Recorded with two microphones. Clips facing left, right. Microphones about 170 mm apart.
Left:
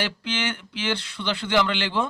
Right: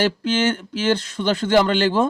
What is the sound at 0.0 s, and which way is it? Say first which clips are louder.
Speech: right 9 dB; 45° right (ahead or behind).